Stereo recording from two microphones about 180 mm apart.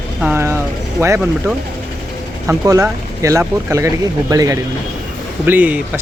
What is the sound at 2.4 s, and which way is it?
Speech, 15° right (ahead or behind).